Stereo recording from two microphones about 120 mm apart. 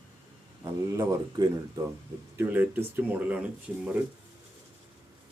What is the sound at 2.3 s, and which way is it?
Speech, 15° right (ahead or behind).